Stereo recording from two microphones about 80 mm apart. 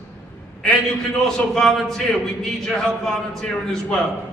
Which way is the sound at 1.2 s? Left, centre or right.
Centre.